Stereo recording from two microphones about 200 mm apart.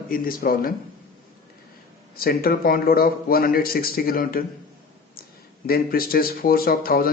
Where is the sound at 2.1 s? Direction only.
50° left (ahead or behind).